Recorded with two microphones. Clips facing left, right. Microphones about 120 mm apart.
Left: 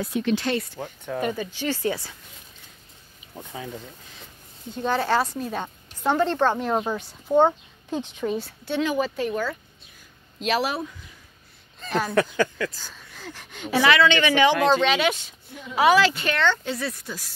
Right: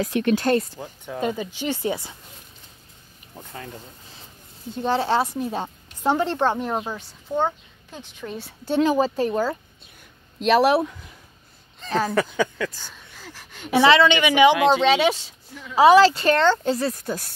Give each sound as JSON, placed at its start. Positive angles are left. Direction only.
{"t": 0.0, "sound": "speech", "side_deg": -75}
{"t": 0.3, "sound": "speech", "side_deg": -45}
{"t": 0.7, "sound": "speech", "side_deg": -10}
{"t": 3.3, "sound": "speech", "side_deg": 10}
{"t": 4.8, "sound": "a woman's voice", "side_deg": -25}
{"t": 6.5, "sound": "a woman's voice", "side_deg": -5}
{"t": 7.2, "sound": "a child's voice", "side_deg": 25}
{"t": 8.6, "sound": "a woman's voice", "side_deg": -40}
{"t": 10.4, "sound": "speech", "side_deg": -55}
{"t": 12.8, "sound": "a sound", "side_deg": -10}
{"t": 13.7, "sound": "a woman's voice", "side_deg": -25}
{"t": 14.8, "sound": "a woman's voice", "side_deg": -30}